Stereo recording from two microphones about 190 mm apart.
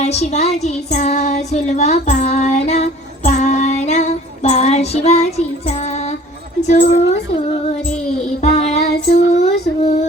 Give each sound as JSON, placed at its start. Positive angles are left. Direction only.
{"t": 0.0, "sound": "child singing", "side_deg": 35}
{"t": 6.6, "sound": "a woman's voice", "side_deg": 35}
{"t": 8.4, "sound": "child singing", "side_deg": 35}
{"t": 9.1, "sound": "speech", "side_deg": 35}